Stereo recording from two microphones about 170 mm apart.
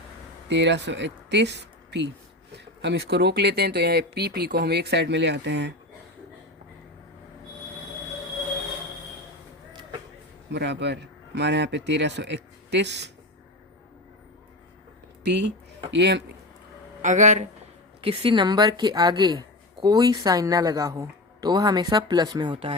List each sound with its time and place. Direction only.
0.4 s speech: 90° right
2.8 s speech: 75° right (ahead or behind)
10.5 s speech: 90° right
15.2 s speech: 85° right
17.0 s speech: 45° right (ahead or behind)
18.0 s a woman's voice: 30° right (ahead or behind)